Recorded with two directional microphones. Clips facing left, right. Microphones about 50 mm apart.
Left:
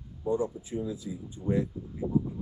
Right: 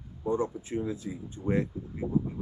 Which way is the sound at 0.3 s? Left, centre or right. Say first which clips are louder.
Even; right.